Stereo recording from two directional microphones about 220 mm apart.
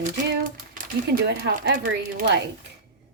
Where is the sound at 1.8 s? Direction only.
45° right (ahead or behind).